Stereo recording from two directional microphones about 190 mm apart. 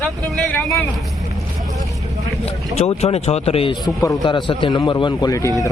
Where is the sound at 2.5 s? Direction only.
30° left (ahead or behind).